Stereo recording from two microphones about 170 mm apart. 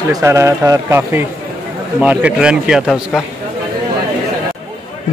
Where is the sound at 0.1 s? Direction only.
15° right (ahead or behind).